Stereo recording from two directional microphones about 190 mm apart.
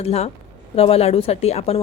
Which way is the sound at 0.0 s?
35° left (ahead or behind).